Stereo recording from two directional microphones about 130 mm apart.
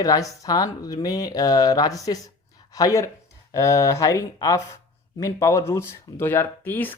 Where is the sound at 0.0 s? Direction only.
30° left (ahead or behind).